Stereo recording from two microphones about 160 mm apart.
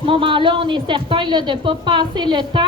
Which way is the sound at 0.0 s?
35° right (ahead or behind).